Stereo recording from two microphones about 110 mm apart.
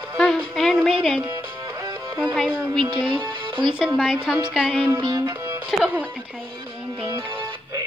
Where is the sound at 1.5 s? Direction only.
40° right (ahead or behind).